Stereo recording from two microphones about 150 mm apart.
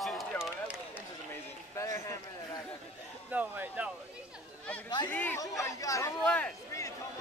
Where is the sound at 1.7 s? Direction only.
20° left (ahead or behind).